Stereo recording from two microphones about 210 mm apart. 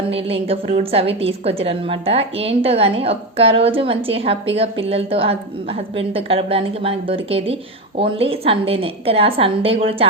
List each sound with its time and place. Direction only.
0.1 s a woman's voice: 25° right (ahead or behind)